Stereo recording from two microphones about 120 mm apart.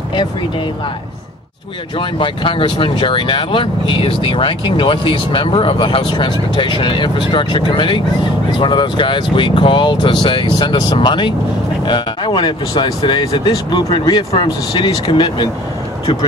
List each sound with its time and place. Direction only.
2.0 s speech: 45° left (ahead or behind)